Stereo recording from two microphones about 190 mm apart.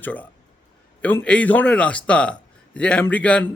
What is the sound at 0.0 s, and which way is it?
A man's voice, 10° left (ahead or behind).